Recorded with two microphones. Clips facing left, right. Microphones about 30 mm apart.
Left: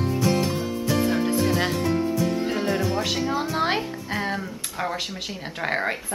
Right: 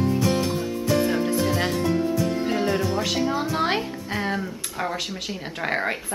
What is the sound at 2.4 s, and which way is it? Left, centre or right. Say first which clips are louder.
A woman's voice: right 1 dB; centre.